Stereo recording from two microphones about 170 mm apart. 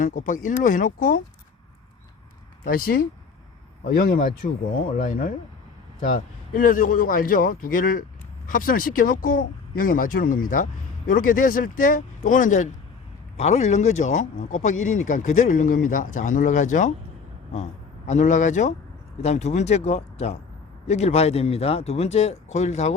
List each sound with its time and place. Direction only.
0.0 s speech: 50° left (ahead or behind)
2.6 s speech: 60° left (ahead or behind)
18.1 s speech: 45° left (ahead or behind)